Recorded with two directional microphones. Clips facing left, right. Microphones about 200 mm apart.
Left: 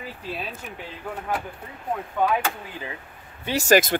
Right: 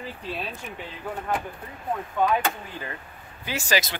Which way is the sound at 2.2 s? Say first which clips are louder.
Even; 5° left (ahead or behind).